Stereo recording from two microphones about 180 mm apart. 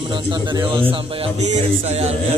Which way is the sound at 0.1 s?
25° right (ahead or behind).